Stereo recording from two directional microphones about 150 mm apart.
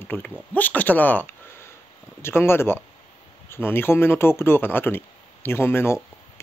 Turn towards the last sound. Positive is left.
turn(degrees=15)  # may be behind; listen again after turning